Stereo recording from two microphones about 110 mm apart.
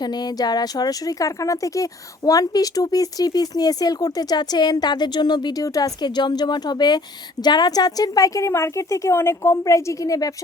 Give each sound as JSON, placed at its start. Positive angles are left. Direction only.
{"t": 0.0, "sound": "a woman's voice", "side_deg": 40}